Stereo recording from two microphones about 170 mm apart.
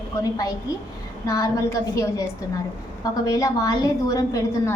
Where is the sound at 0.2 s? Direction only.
20° left (ahead or behind).